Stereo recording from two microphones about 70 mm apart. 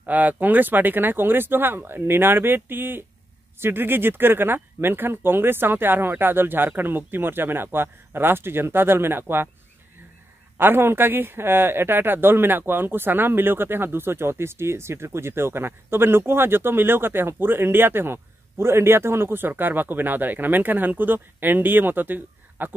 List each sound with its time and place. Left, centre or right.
0.0 s speech: right
10.6 s speech: right